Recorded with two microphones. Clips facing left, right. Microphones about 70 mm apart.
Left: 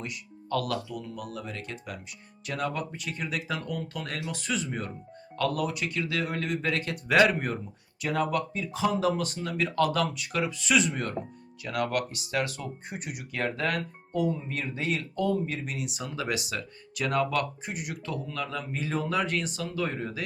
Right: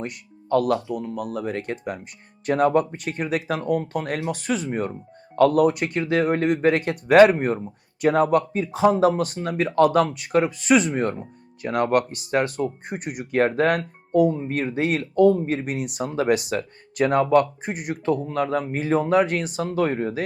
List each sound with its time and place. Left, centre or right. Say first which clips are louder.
0.0 s music: right 6 dB; right
0.7 s speech: right 9 dB; right